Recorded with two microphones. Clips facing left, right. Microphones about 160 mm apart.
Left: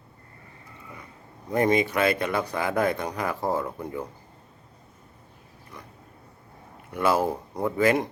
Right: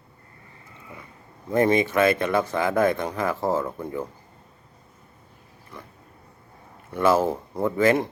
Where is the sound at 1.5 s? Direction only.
15° left (ahead or behind).